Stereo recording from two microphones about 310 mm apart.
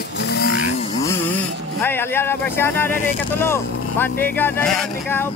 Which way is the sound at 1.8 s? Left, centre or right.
Centre.